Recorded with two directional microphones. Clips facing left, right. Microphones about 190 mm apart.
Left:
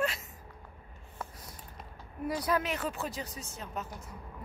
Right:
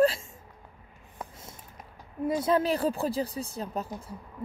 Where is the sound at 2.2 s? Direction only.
25° right (ahead or behind).